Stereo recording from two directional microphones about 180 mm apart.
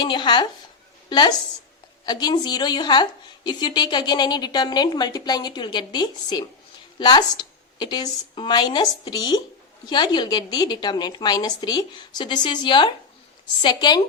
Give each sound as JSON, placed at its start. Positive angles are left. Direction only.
{"t": 0.0, "sound": "a woman's voice", "side_deg": 25}